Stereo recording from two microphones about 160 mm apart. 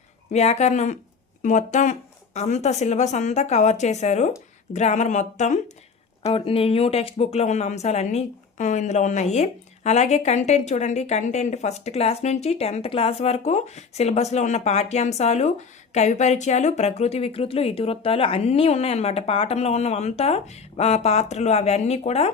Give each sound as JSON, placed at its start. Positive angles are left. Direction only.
{"t": 0.3, "sound": "speech", "side_deg": 45}
{"t": 6.2, "sound": "speech", "side_deg": 35}